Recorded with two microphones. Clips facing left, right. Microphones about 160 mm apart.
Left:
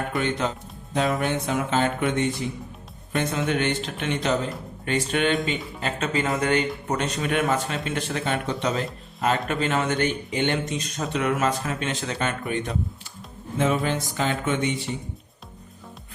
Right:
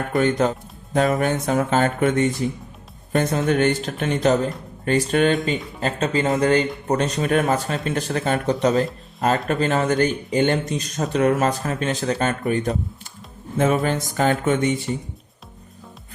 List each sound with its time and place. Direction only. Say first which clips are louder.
0.1 s speech: right 11 dB; 45° right (ahead or behind)
9.5 s speech: right 4 dB; 40° right (ahead or behind)